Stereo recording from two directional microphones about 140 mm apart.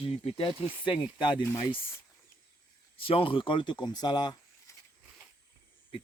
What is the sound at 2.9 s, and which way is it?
Speech, 40° left (ahead or behind).